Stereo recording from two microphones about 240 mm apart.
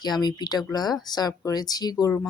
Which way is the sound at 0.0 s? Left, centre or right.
Centre.